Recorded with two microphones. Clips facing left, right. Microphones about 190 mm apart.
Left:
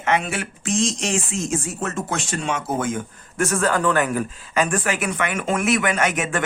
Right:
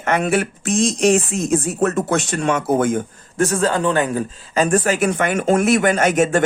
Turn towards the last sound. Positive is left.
turn(degrees=-40)  # may be behind; listen again after turning